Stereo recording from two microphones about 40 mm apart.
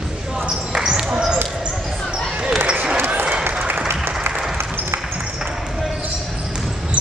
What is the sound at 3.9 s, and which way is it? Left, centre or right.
Applause, right.